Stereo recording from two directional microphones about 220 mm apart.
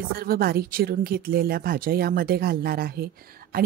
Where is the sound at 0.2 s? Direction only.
45° right (ahead or behind).